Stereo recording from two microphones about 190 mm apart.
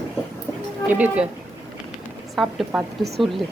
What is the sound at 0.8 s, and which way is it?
Speech, 10° right (ahead or behind).